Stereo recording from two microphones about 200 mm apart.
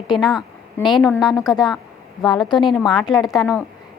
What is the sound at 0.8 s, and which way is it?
Speech, 20° left (ahead or behind).